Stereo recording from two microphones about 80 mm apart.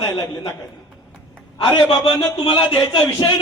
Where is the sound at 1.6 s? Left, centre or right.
Left.